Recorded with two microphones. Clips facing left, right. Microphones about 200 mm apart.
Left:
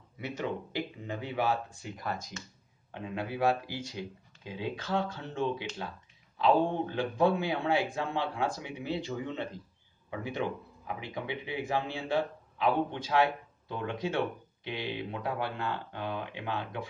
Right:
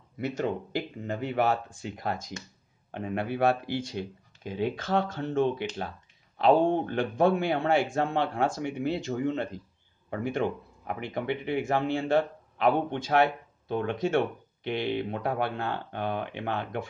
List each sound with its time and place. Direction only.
0.4 s speech: 45° right (ahead or behind)
1.8 s speech: 65° right (ahead or behind)
2.9 s speech: 60° right (ahead or behind)
4.5 s speech: 50° right (ahead or behind)